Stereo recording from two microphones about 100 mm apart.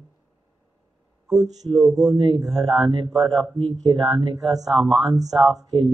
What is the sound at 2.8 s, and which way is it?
Speech, 55° right (ahead or behind).